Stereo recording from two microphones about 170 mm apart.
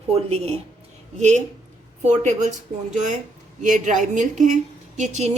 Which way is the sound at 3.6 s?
45° right (ahead or behind).